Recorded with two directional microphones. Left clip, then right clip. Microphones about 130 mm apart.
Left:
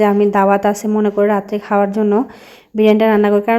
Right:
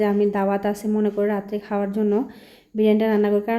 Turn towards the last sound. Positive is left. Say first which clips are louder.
# left 8 dB
turn(degrees=30)  # may be behind; listen again after turning